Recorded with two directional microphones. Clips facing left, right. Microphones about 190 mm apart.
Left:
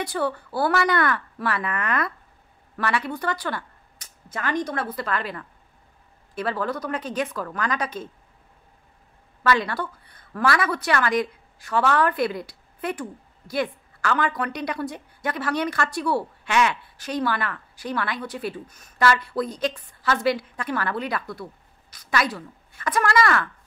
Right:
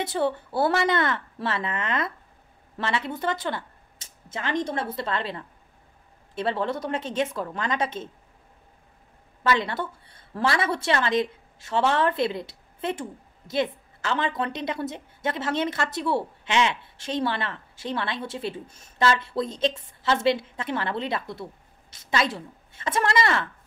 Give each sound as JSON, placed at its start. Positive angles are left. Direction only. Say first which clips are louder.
{"t": 0.0, "sound": "a woman's voice", "louder": "right 1 dB", "side_deg": -25}
{"t": 9.4, "sound": "a woman's voice", "louder": "left 2 dB", "side_deg": -20}